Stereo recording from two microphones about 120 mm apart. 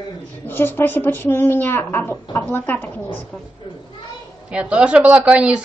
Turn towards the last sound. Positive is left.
turn(degrees=-10)  # may be behind; listen again after turning